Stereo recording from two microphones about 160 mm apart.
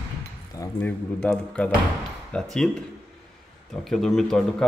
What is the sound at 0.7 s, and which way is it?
Speech, 10° left (ahead or behind).